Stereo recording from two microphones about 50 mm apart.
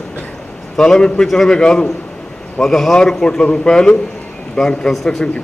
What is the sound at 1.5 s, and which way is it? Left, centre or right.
A man's voice, centre.